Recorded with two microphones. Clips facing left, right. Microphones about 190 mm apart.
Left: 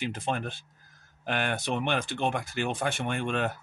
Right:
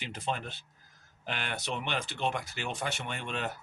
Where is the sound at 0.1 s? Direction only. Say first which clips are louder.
Left 4 dB; 50° left (ahead or behind).